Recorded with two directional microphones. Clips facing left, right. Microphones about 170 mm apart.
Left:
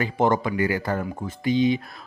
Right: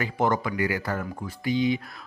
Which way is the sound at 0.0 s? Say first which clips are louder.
Left 3 dB; 25° left (ahead or behind).